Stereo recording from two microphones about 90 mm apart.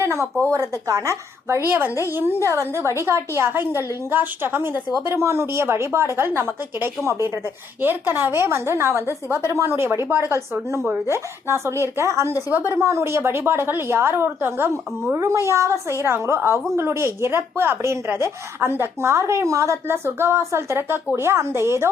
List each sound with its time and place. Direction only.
0.0 s a woman's voice: 30° right (ahead or behind)
2.1 s a woman's voice: 20° right (ahead or behind)
2.4 s a woman's voice: 35° right (ahead or behind)
12.5 s a woman's voice: 20° right (ahead or behind)
12.7 s a woman's voice: 30° right (ahead or behind)